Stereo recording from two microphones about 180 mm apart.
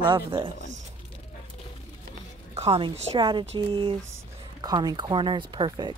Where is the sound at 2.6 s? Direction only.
30° right (ahead or behind).